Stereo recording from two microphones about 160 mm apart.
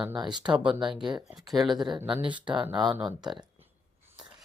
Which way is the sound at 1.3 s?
Centre (ahead or behind).